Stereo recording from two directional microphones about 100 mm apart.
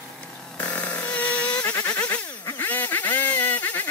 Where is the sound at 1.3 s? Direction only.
10° left (ahead or behind).